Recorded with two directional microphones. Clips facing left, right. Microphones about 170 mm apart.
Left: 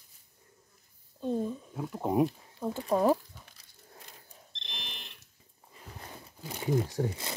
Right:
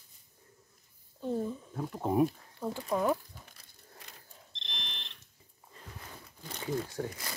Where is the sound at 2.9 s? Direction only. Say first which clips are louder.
Left 4 dB; 30° left (ahead or behind).